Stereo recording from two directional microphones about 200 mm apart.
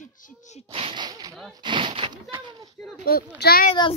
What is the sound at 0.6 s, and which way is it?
Speech, 25° right (ahead or behind).